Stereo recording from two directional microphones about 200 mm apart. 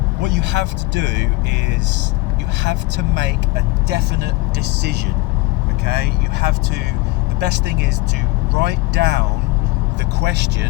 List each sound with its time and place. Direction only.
0.2 s a man's voice: 60° right (ahead or behind)
2.6 s speech: 60° right (ahead or behind)